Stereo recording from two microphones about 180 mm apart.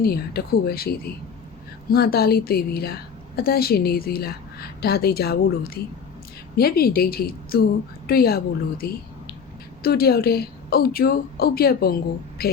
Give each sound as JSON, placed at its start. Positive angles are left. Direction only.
{"t": 0.0, "sound": "a woman's voice", "side_deg": 60}